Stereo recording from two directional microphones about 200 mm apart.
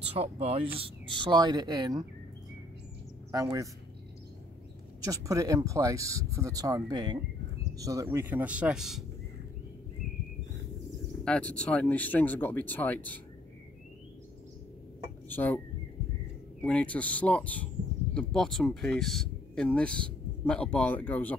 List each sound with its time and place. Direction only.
0.1 s speech: 30° right (ahead or behind)
3.3 s speech: 15° right (ahead or behind)
5.0 s speech: 15° right (ahead or behind)
11.2 s speech: 5° left (ahead or behind)
15.2 s speech: 10° left (ahead or behind)
16.6 s speech: 5° left (ahead or behind)